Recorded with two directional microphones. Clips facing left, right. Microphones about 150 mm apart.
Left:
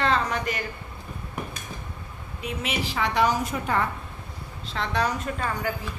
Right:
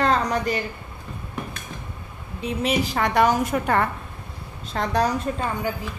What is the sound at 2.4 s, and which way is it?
A woman's voice, 35° right (ahead or behind).